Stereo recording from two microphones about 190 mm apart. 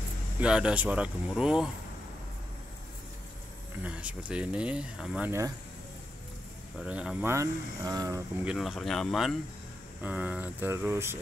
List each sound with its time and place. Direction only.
0.4 s speech: 5° right (ahead or behind)
3.8 s speech: 5° right (ahead or behind)
6.8 s speech: 5° right (ahead or behind)
8.5 s speech: centre (ahead or behind)